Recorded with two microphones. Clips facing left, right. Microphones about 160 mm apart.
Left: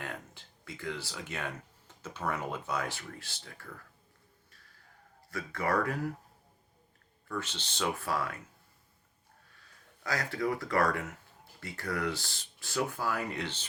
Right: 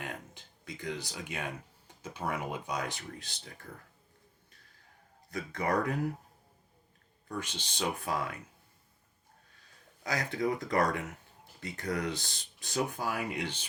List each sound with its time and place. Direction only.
0.0 s speech: 20° right (ahead or behind)
5.3 s speech: 20° right (ahead or behind)
7.3 s speech: 15° right (ahead or behind)
10.0 s speech: 20° right (ahead or behind)